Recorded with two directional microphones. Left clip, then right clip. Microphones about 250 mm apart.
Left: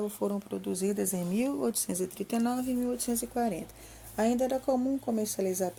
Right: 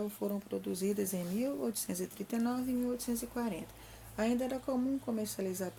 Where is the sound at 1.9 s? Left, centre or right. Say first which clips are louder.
Left 6 dB; centre.